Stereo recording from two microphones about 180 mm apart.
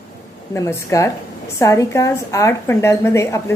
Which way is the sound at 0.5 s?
15° left (ahead or behind).